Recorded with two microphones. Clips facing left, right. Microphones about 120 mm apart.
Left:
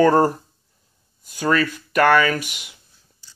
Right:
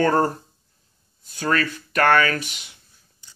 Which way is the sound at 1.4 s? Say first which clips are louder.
Left 3 dB; 10° left (ahead or behind).